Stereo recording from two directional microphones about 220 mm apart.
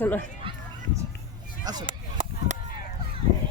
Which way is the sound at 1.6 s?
20° right (ahead or behind).